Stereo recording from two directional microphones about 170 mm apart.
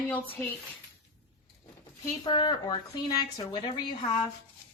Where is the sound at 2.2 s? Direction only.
25° left (ahead or behind).